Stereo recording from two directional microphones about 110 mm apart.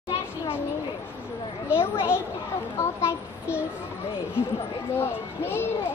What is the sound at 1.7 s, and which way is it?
Speech, 20° left (ahead or behind).